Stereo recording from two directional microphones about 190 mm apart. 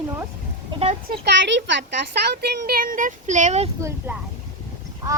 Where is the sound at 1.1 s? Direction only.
65° right (ahead or behind); by 3.7 s 35° right (ahead or behind).